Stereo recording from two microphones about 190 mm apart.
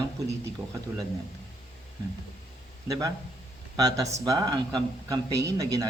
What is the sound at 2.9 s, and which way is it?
A man's voice, 20° right (ahead or behind).